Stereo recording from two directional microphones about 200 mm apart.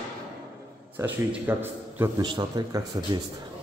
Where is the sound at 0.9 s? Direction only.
10° right (ahead or behind).